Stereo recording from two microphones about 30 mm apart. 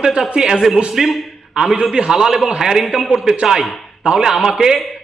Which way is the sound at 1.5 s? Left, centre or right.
Right.